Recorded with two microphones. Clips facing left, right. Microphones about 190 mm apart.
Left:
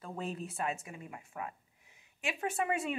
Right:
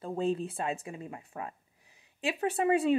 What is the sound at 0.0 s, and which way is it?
Speech, 30° right (ahead or behind).